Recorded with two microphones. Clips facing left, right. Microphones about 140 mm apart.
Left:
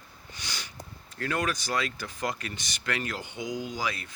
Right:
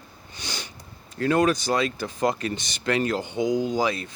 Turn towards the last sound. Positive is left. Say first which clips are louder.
# right 9 dB
turn(degrees=-25)  # may be behind; listen again after turning